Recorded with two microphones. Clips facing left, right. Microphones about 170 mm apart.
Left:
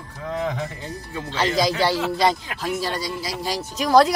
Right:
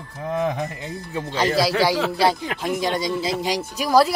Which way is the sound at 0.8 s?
15° right (ahead or behind).